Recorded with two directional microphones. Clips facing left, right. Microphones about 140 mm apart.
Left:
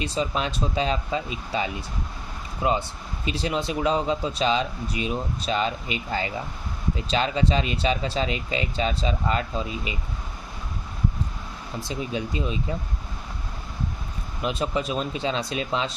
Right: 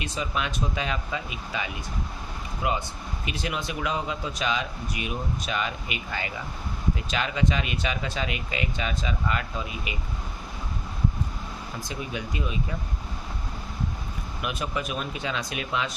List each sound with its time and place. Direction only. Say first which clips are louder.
0.0 s speech: left 4 dB; 30° left (ahead or behind)
11.8 s speech: left 6 dB; 30° left (ahead or behind)
14.4 s speech: left 5 dB; 30° left (ahead or behind)